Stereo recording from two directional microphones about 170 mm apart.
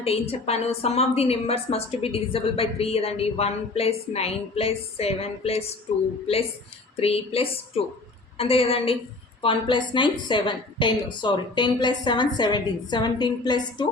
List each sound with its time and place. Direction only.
0.0 s a woman's voice: 35° left (ahead or behind)
6.9 s a woman's voice: 35° left (ahead or behind)